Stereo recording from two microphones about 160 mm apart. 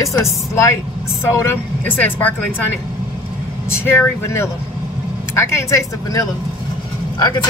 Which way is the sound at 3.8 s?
15° left (ahead or behind).